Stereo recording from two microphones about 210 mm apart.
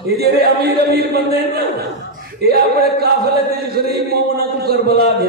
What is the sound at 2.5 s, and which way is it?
Speech, 45° right (ahead or behind).